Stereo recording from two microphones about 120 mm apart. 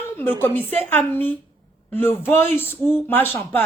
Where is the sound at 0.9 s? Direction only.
15° left (ahead or behind).